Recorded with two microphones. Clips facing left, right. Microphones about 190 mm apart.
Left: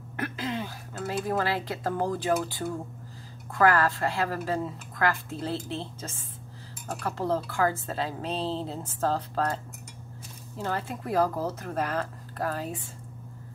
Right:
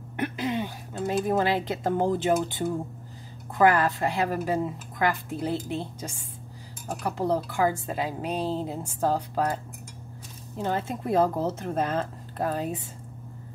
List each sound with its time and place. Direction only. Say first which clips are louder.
0.2 s speech: right 4 dB; 20° right (ahead or behind)